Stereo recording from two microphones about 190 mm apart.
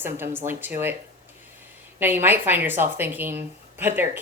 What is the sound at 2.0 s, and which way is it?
Speech, 10° right (ahead or behind).